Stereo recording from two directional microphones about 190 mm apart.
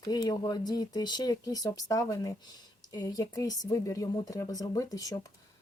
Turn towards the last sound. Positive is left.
turn(degrees=20)  # may be behind; listen again after turning